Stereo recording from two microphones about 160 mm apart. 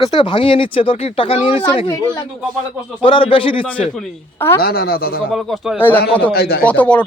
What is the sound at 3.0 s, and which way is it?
Speech, 35° left (ahead or behind).